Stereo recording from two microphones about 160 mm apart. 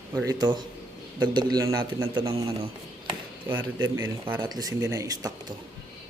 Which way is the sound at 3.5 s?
15° right (ahead or behind).